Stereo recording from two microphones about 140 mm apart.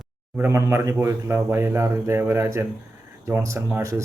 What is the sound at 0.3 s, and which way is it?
A man's voice, 15° right (ahead or behind).